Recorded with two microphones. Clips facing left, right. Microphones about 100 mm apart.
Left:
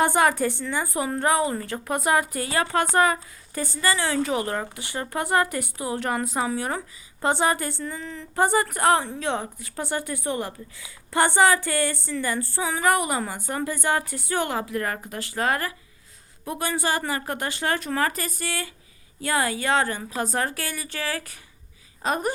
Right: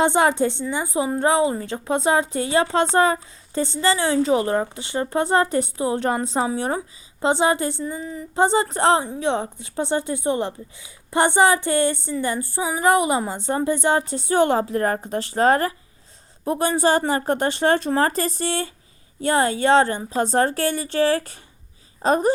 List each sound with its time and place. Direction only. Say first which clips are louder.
0.0 s a woman's voice: right 3 dB; 20° right (ahead or behind)
8.4 s a woman's voice: right 3 dB; 20° right (ahead or behind)